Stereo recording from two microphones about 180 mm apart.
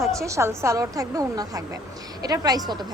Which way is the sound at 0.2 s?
15° right (ahead or behind).